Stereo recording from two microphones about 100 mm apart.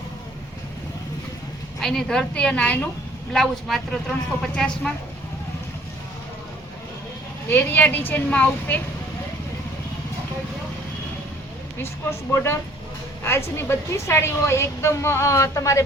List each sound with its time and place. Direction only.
1.8 s a woman's voice: 5° left (ahead or behind)
3.3 s a woman's voice: centre (ahead or behind)
7.5 s a woman's voice: 15° left (ahead or behind)
12.3 s a woman's voice: 25° left (ahead or behind)